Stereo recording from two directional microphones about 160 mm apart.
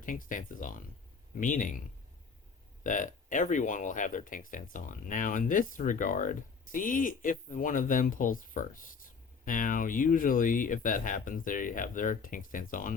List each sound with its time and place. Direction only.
0.0 s speech: 60° left (ahead or behind)
2.8 s speech: 55° left (ahead or behind)